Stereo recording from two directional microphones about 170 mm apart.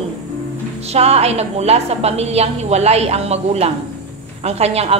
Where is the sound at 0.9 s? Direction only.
35° right (ahead or behind).